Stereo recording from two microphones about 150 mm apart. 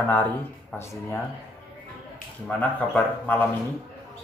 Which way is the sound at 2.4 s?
5° left (ahead or behind).